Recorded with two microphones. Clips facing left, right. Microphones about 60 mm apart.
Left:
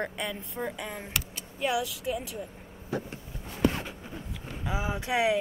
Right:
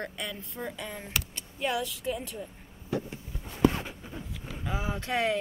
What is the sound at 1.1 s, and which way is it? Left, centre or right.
Speech, centre.